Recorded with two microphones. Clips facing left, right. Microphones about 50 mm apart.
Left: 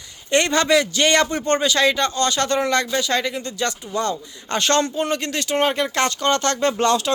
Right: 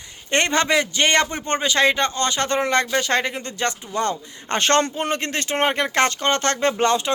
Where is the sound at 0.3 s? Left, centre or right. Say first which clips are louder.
Left 2 dB; right.